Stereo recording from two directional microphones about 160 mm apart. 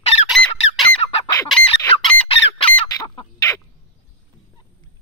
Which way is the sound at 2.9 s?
25° left (ahead or behind).